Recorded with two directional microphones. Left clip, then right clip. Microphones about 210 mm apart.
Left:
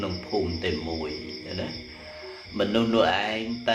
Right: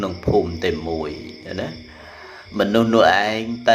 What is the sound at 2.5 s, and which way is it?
Speech, 30° right (ahead or behind).